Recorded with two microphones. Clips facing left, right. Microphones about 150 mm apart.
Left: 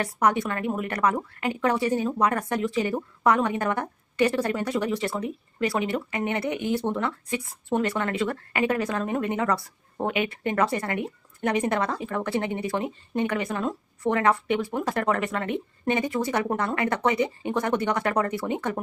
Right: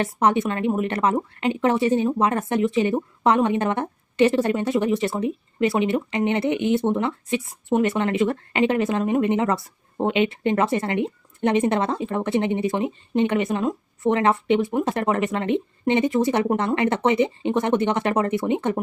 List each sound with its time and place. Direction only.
0.0 s a woman's voice: 25° right (ahead or behind)